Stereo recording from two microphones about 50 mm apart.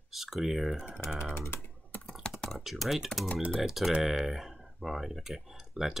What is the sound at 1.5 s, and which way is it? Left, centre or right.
Speech, left.